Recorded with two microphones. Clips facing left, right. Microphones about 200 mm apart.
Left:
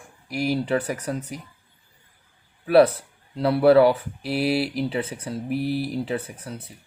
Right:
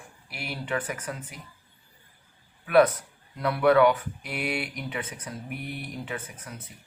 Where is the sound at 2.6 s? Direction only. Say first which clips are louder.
Left 4 dB; 35° left (ahead or behind).